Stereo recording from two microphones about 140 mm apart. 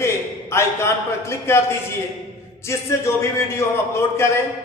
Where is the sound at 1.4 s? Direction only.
20° left (ahead or behind).